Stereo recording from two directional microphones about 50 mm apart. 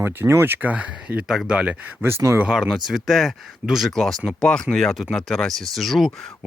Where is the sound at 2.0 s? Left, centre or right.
Right.